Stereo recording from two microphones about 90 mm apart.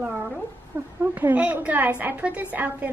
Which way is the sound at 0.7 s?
25° right (ahead or behind).